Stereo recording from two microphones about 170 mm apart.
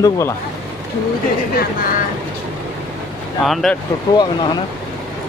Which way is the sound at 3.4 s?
Centre (ahead or behind).